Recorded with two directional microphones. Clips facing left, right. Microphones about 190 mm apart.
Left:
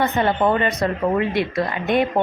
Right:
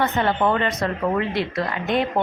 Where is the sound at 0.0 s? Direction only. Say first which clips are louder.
Left 2 dB; 20° left (ahead or behind).